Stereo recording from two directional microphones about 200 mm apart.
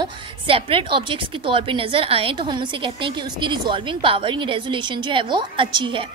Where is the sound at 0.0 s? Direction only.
25° right (ahead or behind).